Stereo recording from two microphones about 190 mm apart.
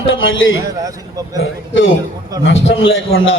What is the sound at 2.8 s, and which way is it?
Speech, 90° left.